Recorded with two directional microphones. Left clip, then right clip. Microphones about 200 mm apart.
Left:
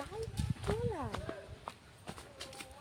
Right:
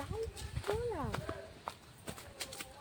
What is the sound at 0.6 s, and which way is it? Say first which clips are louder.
Speech: right 1 dB; 10° right (ahead or behind).